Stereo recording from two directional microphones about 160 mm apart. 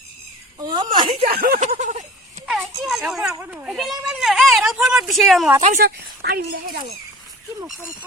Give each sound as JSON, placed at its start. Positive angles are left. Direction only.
{"t": 0.6, "sound": "speech", "side_deg": -25}
{"t": 1.2, "sound": "speech", "side_deg": -70}
{"t": 1.6, "sound": "a sound", "side_deg": -50}
{"t": 2.8, "sound": "speech", "side_deg": 0}
{"t": 5.6, "sound": "speech", "side_deg": -70}